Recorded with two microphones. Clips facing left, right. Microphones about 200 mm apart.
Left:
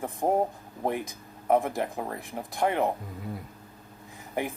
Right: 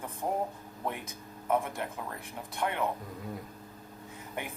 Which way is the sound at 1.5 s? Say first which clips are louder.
Left 6 dB; 45° left (ahead or behind).